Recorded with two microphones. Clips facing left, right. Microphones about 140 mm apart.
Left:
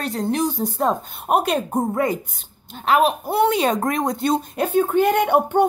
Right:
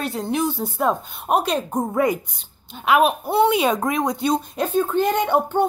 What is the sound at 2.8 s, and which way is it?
A woman's voice, 10° right (ahead or behind).